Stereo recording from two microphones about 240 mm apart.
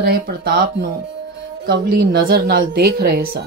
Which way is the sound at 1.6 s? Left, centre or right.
Right.